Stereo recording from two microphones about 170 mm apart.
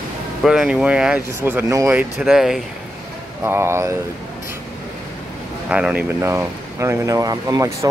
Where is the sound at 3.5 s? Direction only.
15° right (ahead or behind).